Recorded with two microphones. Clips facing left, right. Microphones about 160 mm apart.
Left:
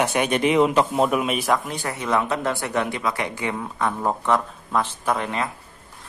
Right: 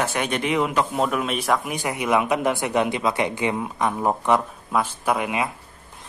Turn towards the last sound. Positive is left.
turn(degrees=-10)  # may be behind; listen again after turning